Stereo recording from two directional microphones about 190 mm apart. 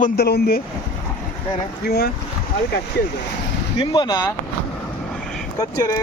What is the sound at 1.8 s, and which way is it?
Speech, 60° left (ahead or behind).